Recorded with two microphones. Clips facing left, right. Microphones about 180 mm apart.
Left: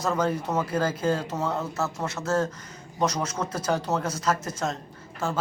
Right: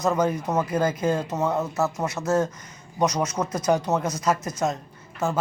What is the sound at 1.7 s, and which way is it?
Speech, 25° right (ahead or behind).